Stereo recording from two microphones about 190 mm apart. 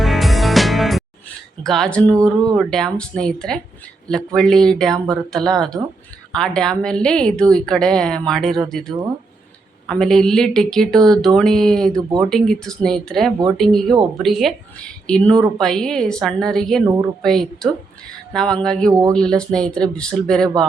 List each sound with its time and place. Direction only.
0.0 s music: centre (ahead or behind)
1.6 s a woman's voice: centre (ahead or behind)
16.8 s speech: 20° right (ahead or behind)
17.2 s a woman's voice: centre (ahead or behind)